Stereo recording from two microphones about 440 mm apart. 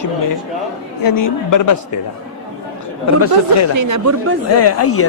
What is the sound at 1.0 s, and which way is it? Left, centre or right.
Speech, left.